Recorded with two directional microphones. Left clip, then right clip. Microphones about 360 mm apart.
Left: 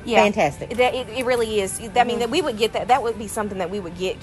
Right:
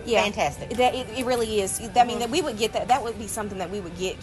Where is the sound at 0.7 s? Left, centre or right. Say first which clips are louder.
Left 1 dB; centre.